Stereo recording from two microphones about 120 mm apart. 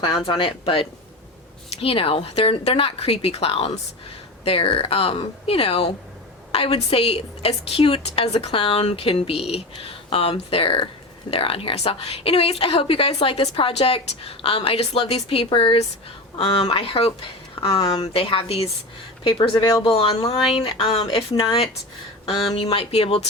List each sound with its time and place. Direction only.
0.3 s a woman's voice: 45° left (ahead or behind)
19.6 s speech: 30° left (ahead or behind)
19.9 s a woman's voice: 50° left (ahead or behind)